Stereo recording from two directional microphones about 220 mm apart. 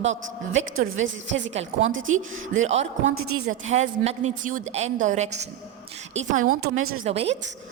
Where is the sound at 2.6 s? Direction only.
30° right (ahead or behind).